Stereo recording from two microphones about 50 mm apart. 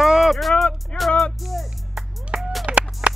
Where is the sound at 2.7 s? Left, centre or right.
Right.